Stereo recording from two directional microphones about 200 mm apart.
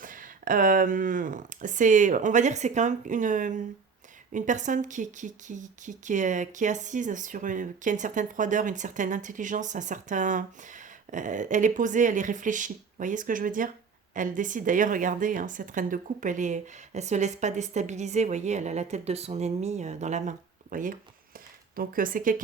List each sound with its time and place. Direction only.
0.0 s a woman's voice: 40° right (ahead or behind)